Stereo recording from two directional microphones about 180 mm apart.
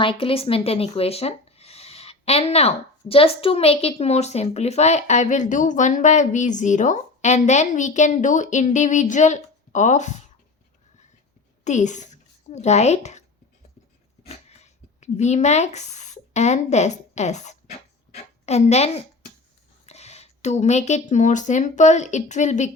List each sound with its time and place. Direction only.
0.0 s speech: 30° left (ahead or behind)
11.6 s speech: 40° left (ahead or behind)
14.3 s a sound: 40° left (ahead or behind)
18.4 s speech: 35° left (ahead or behind)